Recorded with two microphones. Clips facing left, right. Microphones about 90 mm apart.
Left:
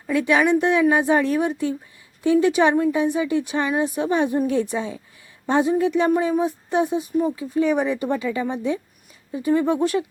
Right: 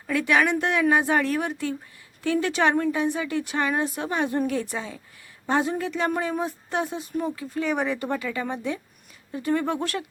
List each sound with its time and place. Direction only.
0.1 s speech: 20° left (ahead or behind)